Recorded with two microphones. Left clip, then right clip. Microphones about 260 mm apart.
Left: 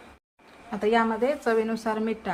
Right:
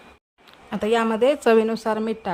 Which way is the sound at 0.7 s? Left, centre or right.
Right.